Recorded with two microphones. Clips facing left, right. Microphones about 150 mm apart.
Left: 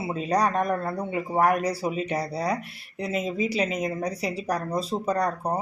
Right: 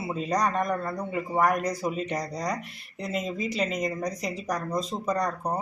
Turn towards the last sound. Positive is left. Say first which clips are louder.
# left 2 dB
turn(degrees=10)  # may be behind; listen again after turning